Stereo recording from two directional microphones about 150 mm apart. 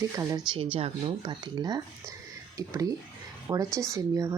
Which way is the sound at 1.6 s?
25° right (ahead or behind).